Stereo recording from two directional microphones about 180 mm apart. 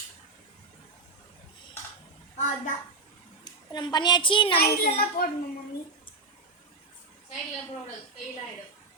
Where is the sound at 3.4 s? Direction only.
25° left (ahead or behind).